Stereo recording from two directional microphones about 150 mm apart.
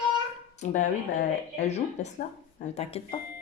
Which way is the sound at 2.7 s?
40° left (ahead or behind).